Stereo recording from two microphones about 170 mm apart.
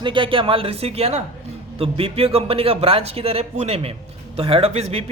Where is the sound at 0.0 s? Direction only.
30° right (ahead or behind).